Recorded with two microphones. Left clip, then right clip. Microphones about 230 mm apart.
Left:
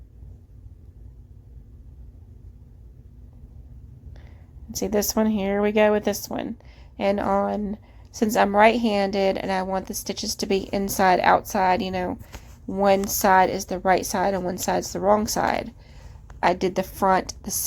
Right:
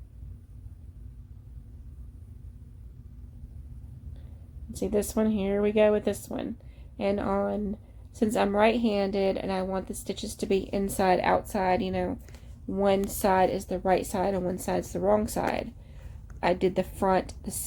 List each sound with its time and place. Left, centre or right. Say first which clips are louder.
4.8 s a woman's voice: left 4 dB; centre